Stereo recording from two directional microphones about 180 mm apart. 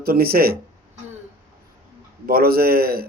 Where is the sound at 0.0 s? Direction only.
55° right (ahead or behind).